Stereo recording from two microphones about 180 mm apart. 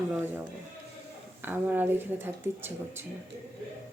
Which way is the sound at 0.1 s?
10° right (ahead or behind).